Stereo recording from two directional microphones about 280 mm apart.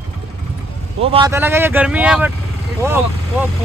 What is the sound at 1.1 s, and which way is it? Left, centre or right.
Speech, centre.